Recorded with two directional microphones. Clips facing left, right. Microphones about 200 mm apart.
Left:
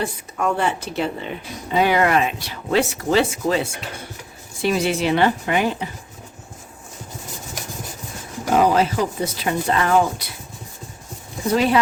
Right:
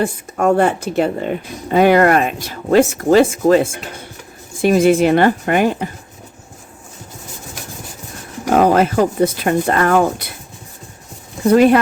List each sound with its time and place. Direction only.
0.0 s speech: 50° right (ahead or behind)
8.5 s speech: 55° right (ahead or behind)
11.5 s speech: 55° right (ahead or behind)